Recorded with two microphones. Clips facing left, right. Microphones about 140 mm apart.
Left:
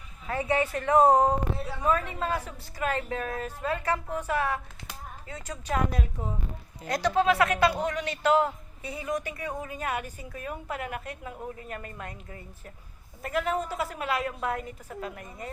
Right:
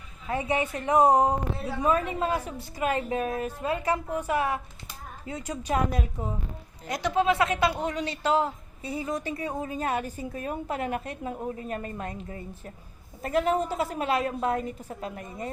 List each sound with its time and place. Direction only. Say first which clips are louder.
0.3 s a woman's voice: even; 20° right (ahead or behind)